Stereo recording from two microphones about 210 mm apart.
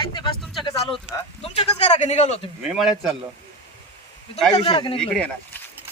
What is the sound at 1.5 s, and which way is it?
Speech, 30° left (ahead or behind).